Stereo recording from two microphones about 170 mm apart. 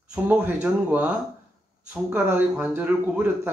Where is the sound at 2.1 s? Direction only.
10° right (ahead or behind).